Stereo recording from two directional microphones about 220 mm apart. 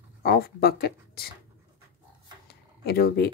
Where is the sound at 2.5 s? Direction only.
45° left (ahead or behind).